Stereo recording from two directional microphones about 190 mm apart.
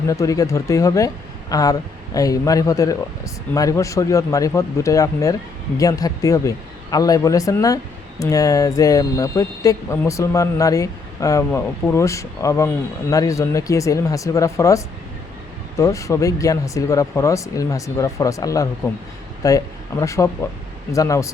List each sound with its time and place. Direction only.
0.1 s speech: 15° left (ahead or behind)